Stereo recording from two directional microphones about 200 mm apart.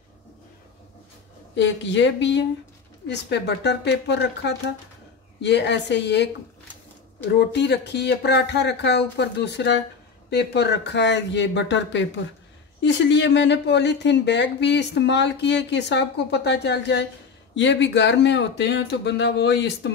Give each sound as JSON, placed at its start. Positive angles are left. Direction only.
{"t": 1.5, "sound": "speech", "side_deg": 65}
{"t": 7.3, "sound": "speech", "side_deg": 60}